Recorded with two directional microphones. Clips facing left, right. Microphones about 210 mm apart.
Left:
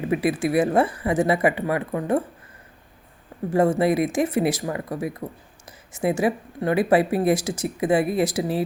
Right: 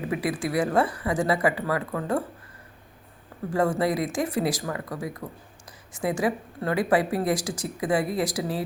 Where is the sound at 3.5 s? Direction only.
25° left (ahead or behind).